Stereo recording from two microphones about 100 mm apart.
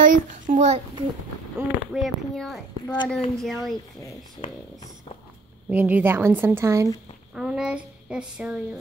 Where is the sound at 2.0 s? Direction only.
Centre (ahead or behind).